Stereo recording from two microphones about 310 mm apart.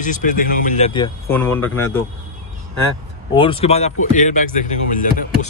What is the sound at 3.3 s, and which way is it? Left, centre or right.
Speech, centre.